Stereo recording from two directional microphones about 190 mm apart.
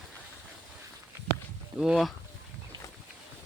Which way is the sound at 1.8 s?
Centre (ahead or behind).